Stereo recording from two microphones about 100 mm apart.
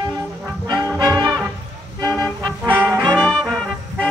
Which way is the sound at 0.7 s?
45° right (ahead or behind).